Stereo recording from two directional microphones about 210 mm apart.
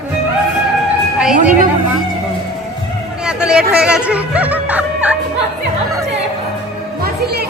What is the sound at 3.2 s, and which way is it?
Music, 5° right (ahead or behind).